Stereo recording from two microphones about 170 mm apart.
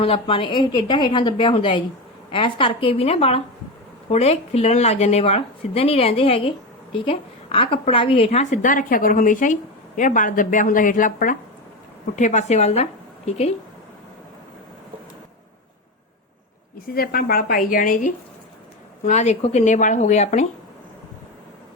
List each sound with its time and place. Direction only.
0.0 s a woman's voice: 30° left (ahead or behind)
16.7 s a woman's voice: 60° left (ahead or behind)
19.0 s a woman's voice: 45° left (ahead or behind)